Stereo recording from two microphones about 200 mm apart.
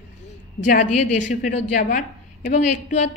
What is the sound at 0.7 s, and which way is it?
A woman's voice, 40° left (ahead or behind).